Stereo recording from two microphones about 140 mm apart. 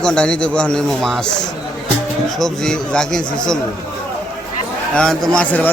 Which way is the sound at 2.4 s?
5° left (ahead or behind).